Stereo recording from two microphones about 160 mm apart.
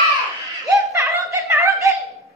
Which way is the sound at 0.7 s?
20° right (ahead or behind).